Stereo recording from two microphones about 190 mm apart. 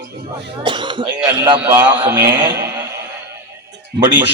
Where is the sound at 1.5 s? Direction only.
10° right (ahead or behind).